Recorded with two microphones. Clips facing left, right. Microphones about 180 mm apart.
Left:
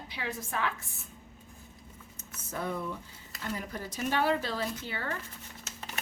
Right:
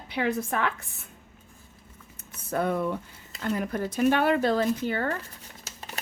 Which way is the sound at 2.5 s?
65° right (ahead or behind).